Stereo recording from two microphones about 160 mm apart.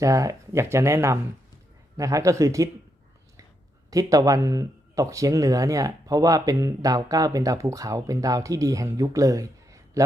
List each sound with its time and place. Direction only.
0.0 s speech: 20° right (ahead or behind)
3.8 s speech: 20° right (ahead or behind)